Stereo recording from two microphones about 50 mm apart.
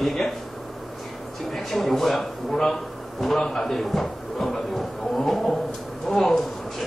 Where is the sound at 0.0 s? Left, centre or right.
Centre.